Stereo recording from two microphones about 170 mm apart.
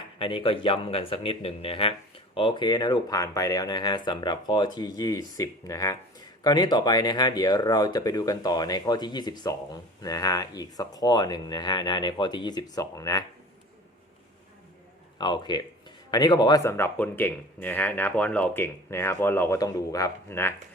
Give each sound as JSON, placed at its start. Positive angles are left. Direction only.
{"t": 0.2, "sound": "speech", "side_deg": 30}
{"t": 15.2, "sound": "speech", "side_deg": 25}